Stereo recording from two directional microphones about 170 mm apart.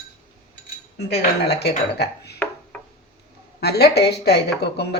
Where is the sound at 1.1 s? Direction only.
75° left (ahead or behind).